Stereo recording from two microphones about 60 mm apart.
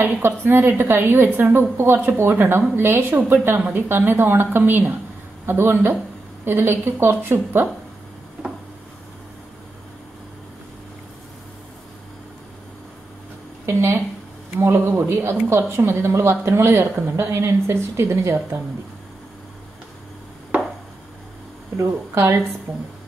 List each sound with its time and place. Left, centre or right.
0.0 s a woman's voice: right
13.7 s a woman's voice: right
21.8 s a woman's voice: right